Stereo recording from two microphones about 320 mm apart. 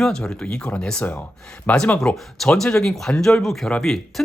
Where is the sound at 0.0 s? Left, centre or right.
Centre.